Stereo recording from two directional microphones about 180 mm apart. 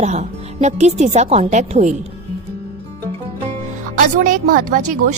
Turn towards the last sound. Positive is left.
turn(degrees=-50)  # may be behind; listen again after turning